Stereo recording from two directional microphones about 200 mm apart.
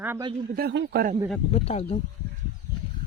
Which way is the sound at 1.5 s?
30° left (ahead or behind).